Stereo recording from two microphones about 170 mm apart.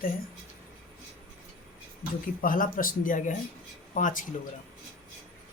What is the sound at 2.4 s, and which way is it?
Speech, 55° left (ahead or behind).